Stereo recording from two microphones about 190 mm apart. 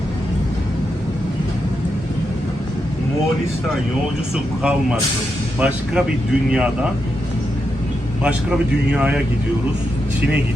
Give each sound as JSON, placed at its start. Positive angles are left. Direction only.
{"t": 5.5, "sound": "speech", "side_deg": -5}
{"t": 8.2, "sound": "speech", "side_deg": -5}